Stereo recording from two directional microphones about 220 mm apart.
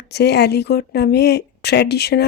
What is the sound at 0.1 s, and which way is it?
Speech, 50° left (ahead or behind).